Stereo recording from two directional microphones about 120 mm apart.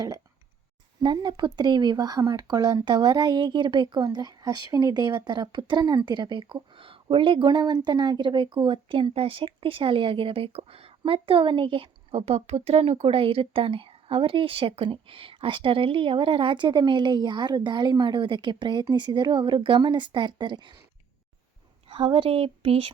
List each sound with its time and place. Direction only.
1.0 s a woman's voice: 40° right (ahead or behind)
21.8 s speech: 45° right (ahead or behind)